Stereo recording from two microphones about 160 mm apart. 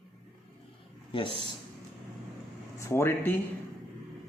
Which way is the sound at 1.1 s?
30° left (ahead or behind).